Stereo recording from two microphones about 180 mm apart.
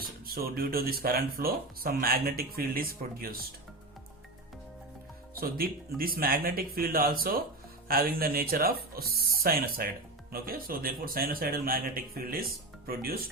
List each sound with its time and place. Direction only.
0.3 s speech: 55° right (ahead or behind)
5.3 s speech: 55° right (ahead or behind)